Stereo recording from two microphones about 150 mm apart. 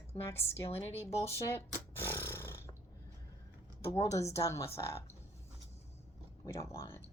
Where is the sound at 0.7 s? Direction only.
45° left (ahead or behind).